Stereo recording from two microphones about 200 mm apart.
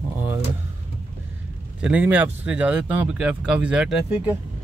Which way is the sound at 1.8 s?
5° right (ahead or behind).